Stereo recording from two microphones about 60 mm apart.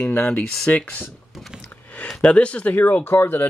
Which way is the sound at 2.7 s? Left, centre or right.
Left.